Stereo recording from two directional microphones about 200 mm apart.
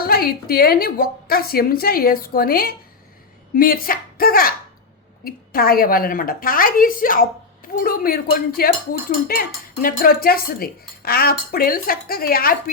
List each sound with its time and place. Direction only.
0.0 s a woman's voice: 50° left (ahead or behind)